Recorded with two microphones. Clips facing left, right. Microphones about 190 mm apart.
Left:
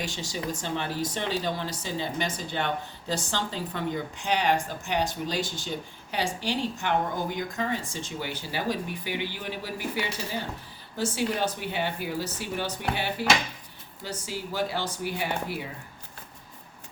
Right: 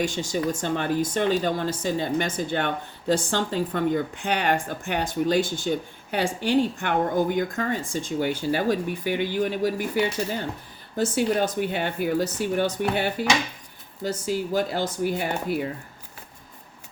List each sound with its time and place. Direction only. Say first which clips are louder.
0.0 s speech: right 8 dB; 50° right (ahead or behind)